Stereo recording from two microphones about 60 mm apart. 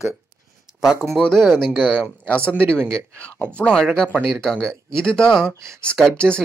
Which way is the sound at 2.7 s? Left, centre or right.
Centre.